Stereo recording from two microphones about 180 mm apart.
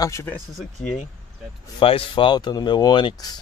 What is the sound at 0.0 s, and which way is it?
Speech, 15° left (ahead or behind).